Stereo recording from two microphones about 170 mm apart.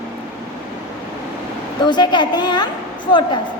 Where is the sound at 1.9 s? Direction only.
25° left (ahead or behind).